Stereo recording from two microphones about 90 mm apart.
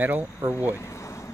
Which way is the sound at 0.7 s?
30° left (ahead or behind).